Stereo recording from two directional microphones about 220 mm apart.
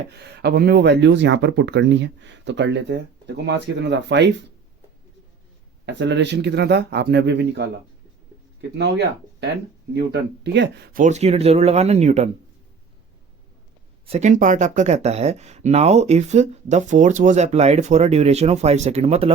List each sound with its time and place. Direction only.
0.1 s speech: 50° right (ahead or behind)
5.8 s speech: 55° right (ahead or behind)
8.8 s speech: 50° right (ahead or behind); by 12.3 s 30° right (ahead or behind)
14.1 s speech: 30° right (ahead or behind)